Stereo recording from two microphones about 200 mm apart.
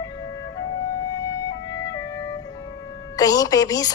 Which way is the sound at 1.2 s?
15° left (ahead or behind).